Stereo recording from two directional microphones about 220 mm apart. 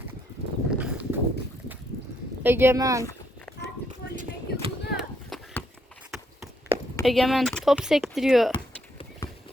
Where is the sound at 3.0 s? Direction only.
15° left (ahead or behind).